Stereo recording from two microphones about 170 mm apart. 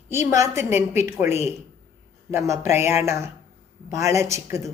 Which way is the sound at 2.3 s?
15° right (ahead or behind).